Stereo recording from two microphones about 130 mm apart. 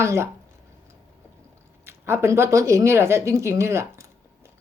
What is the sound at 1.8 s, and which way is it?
Speech, 20° right (ahead or behind).